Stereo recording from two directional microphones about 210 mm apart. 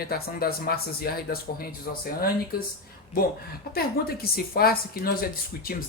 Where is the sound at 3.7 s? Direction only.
45° left (ahead or behind).